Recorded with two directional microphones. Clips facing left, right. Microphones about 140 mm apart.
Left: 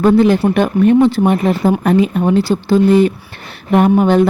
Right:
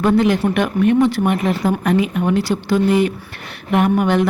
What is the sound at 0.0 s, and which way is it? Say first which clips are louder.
Speech: left 5 dB; 35° left (ahead or behind).